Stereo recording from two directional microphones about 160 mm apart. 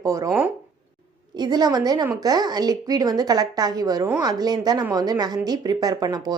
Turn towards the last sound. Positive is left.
turn(degrees=-25)  # may be behind; listen again after turning